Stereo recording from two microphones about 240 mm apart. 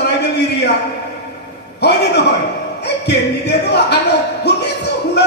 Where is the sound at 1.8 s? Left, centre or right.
Left.